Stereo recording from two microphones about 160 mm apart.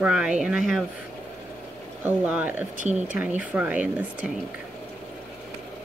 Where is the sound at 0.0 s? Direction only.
5° right (ahead or behind).